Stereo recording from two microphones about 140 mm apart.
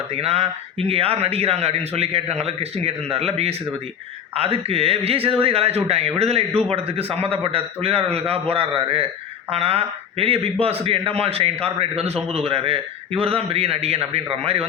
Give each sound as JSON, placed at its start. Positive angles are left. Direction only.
{"t": 0.1, "sound": "a man's voice", "side_deg": -45}